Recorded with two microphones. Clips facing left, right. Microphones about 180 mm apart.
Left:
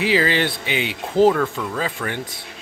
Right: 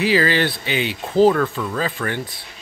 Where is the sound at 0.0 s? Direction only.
20° left (ahead or behind).